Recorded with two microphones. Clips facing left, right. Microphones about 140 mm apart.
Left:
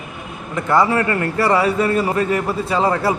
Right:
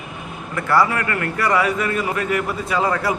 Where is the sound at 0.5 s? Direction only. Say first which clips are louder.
Left 2 dB; 20° left (ahead or behind).